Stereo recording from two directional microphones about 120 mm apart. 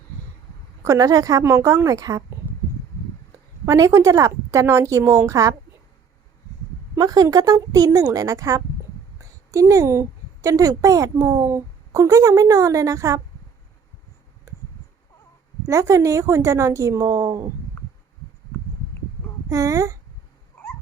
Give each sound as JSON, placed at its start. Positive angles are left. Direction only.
{"t": 0.9, "sound": "a woman's voice", "side_deg": -30}
{"t": 3.7, "sound": "a woman's voice", "side_deg": -25}
{"t": 6.9, "sound": "a woman's voice", "side_deg": -30}
{"t": 14.5, "sound": "a sound", "side_deg": -25}
{"t": 15.6, "sound": "a woman's voice", "side_deg": -25}
{"t": 19.5, "sound": "a woman's voice", "side_deg": -25}